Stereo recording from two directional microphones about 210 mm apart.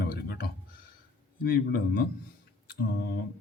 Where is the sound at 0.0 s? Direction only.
50° left (ahead or behind).